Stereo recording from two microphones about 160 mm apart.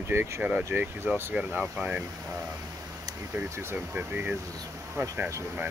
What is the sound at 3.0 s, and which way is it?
Speech, 15° right (ahead or behind).